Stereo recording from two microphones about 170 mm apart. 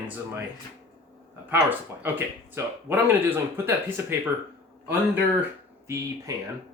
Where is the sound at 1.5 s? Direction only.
10° right (ahead or behind).